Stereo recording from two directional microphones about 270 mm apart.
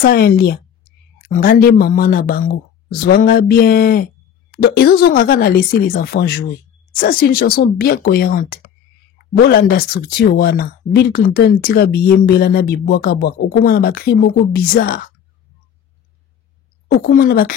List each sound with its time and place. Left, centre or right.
0.0 s speech: left
16.9 s speech: left